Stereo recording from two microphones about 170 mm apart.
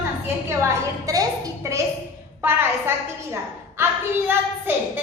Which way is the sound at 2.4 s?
15° right (ahead or behind).